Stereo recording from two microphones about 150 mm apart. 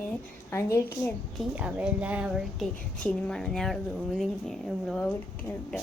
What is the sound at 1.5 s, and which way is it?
A woman's voice, 10° right (ahead or behind).